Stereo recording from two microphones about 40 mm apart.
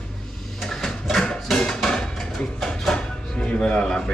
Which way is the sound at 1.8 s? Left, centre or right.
Centre.